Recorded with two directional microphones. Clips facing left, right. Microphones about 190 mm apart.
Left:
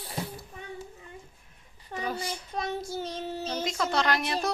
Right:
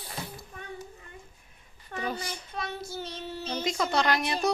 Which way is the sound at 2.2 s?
40° left (ahead or behind).